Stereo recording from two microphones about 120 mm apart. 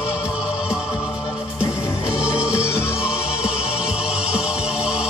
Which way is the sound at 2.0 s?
10° right (ahead or behind).